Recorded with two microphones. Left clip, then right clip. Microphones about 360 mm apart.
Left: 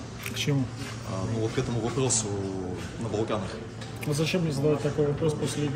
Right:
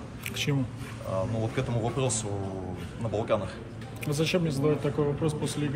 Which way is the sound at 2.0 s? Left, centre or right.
Right.